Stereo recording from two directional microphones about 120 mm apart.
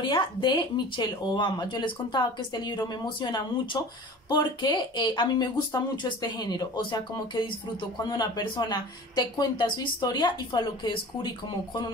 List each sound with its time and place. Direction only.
0.1 s speech: 40° left (ahead or behind)